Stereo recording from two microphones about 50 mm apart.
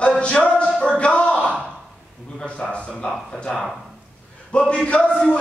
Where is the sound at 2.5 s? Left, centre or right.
Left.